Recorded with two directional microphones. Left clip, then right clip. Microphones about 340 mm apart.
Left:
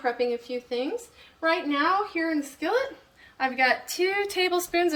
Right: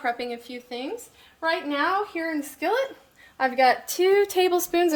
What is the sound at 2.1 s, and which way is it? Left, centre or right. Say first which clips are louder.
A woman's voice: left 1 dB; centre.